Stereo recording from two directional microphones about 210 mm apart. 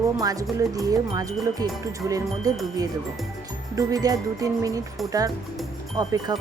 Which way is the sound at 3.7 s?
15° right (ahead or behind).